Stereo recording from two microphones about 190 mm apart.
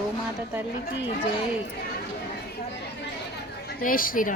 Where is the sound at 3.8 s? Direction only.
45° left (ahead or behind).